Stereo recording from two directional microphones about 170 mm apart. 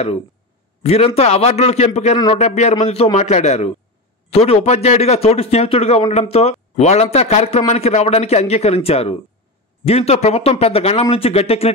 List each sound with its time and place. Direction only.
0.8 s a man's voice: 35° left (ahead or behind)